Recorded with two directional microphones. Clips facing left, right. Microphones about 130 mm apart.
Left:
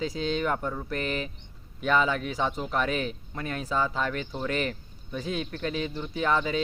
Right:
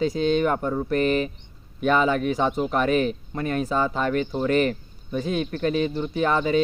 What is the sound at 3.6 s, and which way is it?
Speech, 20° right (ahead or behind).